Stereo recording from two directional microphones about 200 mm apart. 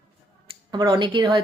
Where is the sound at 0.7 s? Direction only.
20° right (ahead or behind).